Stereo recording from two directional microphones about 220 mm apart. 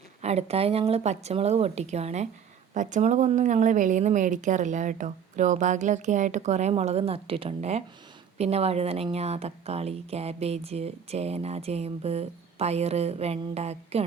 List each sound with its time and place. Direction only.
0.2 s a woman's voice: 30° right (ahead or behind)